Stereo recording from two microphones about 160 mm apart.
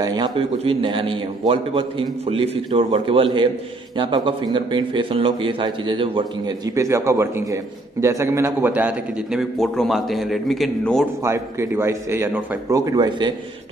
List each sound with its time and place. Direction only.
0.0 s a man's voice: 25° right (ahead or behind)
6.7 s a man's voice: 20° right (ahead or behind); by 11.1 s centre (ahead or behind)
11.2 s a man's voice: 15° right (ahead or behind)